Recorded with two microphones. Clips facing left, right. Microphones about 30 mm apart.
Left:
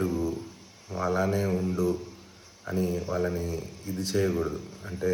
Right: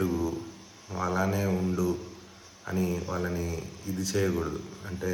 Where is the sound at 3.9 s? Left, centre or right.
Left.